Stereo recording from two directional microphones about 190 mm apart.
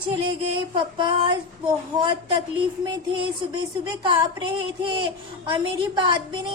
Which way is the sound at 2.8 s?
25° right (ahead or behind).